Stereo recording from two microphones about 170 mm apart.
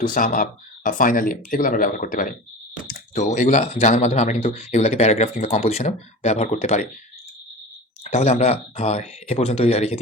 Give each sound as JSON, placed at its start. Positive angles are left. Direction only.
{"t": 0.0, "sound": "speech", "side_deg": 50}
{"t": 8.0, "sound": "speech", "side_deg": 40}